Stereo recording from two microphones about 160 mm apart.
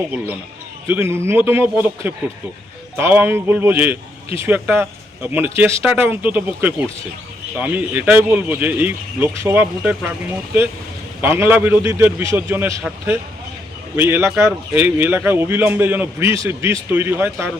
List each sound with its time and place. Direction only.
0.9 s speech: 15° right (ahead or behind)
13.9 s speech: 15° right (ahead or behind)